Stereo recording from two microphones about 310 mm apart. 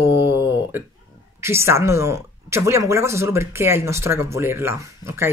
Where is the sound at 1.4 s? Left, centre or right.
Centre.